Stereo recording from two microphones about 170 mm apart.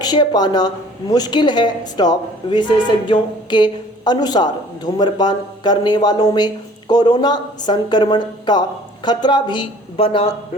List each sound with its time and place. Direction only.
0.0 s speech: 25° left (ahead or behind)